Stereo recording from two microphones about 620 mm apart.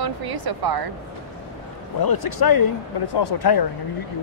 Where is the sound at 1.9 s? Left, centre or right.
Left.